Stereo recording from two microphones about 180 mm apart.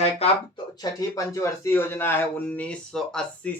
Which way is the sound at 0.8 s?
20° left (ahead or behind).